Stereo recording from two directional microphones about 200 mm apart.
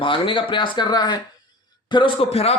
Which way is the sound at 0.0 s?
25° left (ahead or behind).